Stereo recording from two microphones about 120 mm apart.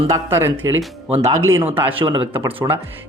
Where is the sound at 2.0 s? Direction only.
45° right (ahead or behind).